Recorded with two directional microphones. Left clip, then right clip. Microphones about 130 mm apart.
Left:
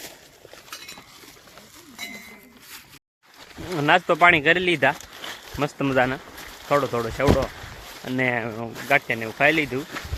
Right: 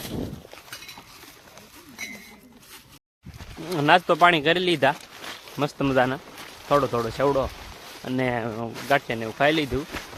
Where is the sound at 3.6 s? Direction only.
5° right (ahead or behind).